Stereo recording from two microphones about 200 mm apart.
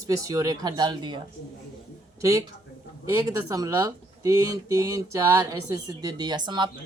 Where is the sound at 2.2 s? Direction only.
15° right (ahead or behind).